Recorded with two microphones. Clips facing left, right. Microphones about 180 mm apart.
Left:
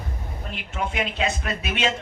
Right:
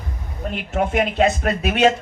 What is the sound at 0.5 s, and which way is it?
Speech, 50° right (ahead or behind).